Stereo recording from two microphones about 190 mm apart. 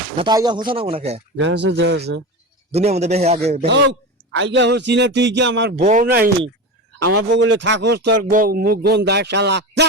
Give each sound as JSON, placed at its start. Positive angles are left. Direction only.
{"t": 0.2, "sound": "speech", "side_deg": -25}
{"t": 1.4, "sound": "speech", "side_deg": -65}
{"t": 2.7, "sound": "a man's voice", "side_deg": -35}
{"t": 3.7, "sound": "a man's voice", "side_deg": -80}
{"t": 5.8, "sound": "speech", "side_deg": -40}
{"t": 7.3, "sound": "a man's voice", "side_deg": -75}
{"t": 8.3, "sound": "speech", "side_deg": -50}